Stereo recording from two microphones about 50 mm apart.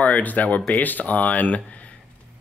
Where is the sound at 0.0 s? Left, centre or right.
Left.